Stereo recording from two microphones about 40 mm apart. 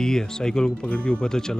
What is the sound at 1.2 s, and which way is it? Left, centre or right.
Speech, centre.